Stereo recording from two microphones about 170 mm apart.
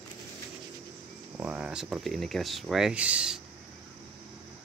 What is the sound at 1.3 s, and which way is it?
Speech, 10° right (ahead or behind).